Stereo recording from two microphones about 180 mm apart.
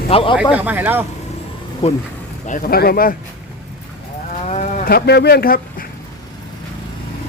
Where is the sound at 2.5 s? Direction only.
50° left (ahead or behind).